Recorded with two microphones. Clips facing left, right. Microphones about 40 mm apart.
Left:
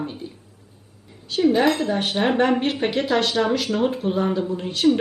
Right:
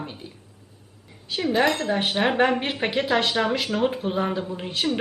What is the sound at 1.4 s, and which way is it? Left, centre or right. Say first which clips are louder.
Speech: left 3 dB; centre.